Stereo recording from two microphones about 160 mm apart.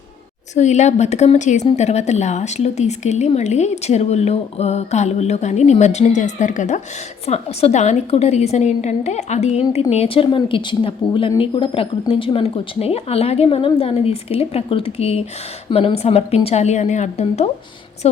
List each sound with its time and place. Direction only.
0.5 s speech: 45° left (ahead or behind)